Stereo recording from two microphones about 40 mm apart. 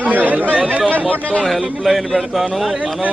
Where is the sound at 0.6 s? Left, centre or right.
Right.